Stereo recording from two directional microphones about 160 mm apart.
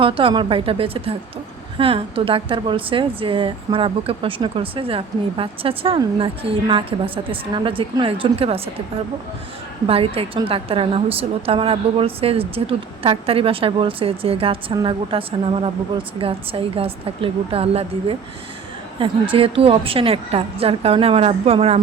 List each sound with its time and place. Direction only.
0.0 s speech: 35° right (ahead or behind)
9.8 s speech: 35° right (ahead or behind)
16.2 s speech: 35° right (ahead or behind)
19.3 s speech: 35° right (ahead or behind)